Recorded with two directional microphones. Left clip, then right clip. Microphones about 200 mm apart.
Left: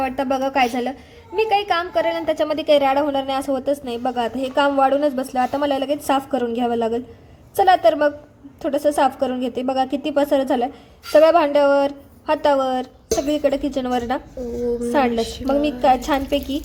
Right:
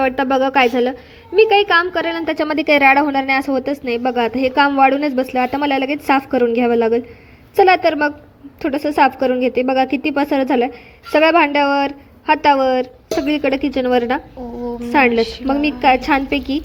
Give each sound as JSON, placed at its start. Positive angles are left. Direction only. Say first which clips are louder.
{"t": 0.0, "sound": "a woman's voice", "louder": "right 5 dB", "side_deg": -15}
{"t": 15.1, "sound": "a woman's voice", "louder": "right 6 dB", "side_deg": 0}
{"t": 15.8, "sound": "a woman's voice", "louder": "right 5 dB", "side_deg": -15}